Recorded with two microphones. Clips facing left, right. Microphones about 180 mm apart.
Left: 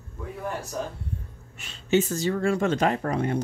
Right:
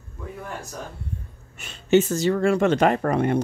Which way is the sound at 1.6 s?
60° right (ahead or behind).